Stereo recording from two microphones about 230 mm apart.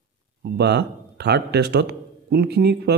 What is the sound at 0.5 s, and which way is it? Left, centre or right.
A man's voice, right.